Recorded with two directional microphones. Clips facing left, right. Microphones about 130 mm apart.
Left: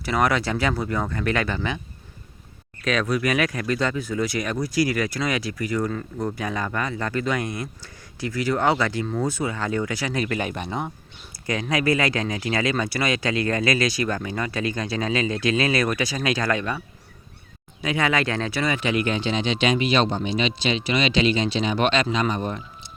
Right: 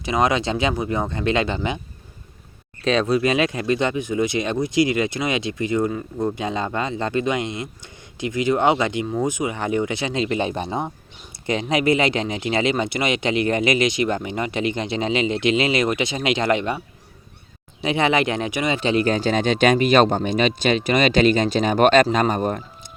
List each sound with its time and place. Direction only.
0.0 s speech: 20° right (ahead or behind)
2.8 s speech: 25° right (ahead or behind)
17.8 s speech: 25° right (ahead or behind); by 22.6 s 50° right (ahead or behind)